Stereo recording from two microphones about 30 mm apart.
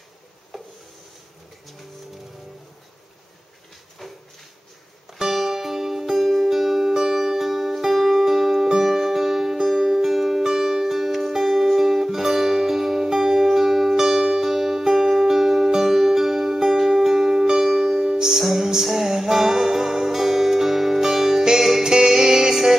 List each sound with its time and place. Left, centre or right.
0.5 s stir: centre
4.0 s a sound: centre
5.2 s music: centre
17.9 s music: right
18.2 s music: centre